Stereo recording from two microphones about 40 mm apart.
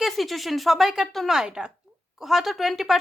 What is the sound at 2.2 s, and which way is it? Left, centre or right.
Speech, centre.